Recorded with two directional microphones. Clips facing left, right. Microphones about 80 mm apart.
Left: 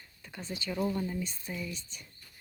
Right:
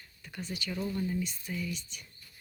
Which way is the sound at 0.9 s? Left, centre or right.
Left.